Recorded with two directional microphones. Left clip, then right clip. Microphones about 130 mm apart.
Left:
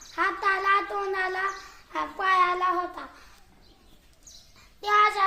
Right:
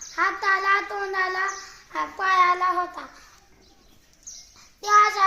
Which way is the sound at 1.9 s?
5° left (ahead or behind).